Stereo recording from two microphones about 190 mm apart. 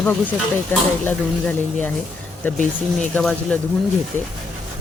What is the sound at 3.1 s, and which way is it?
Speech, 5° left (ahead or behind).